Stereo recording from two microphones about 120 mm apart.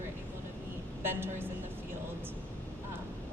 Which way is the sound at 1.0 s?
20° right (ahead or behind).